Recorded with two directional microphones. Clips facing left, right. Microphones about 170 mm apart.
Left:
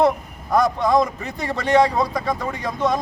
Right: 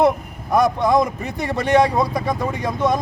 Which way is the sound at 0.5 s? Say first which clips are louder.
Right 1 dB; 15° right (ahead or behind).